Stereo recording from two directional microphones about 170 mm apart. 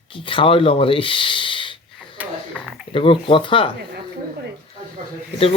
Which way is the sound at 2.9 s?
30° left (ahead or behind).